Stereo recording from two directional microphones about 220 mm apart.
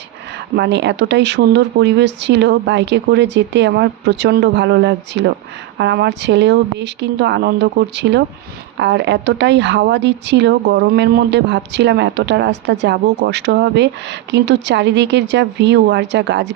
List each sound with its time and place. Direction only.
0.5 s speech: 50° right (ahead or behind)